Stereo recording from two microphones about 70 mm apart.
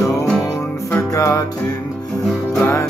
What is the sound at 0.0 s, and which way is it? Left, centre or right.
Music, left.